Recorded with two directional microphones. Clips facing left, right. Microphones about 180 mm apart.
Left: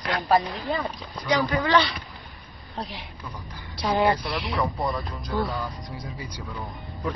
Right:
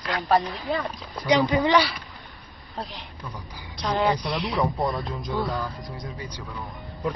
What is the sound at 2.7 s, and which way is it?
Speech, centre (ahead or behind).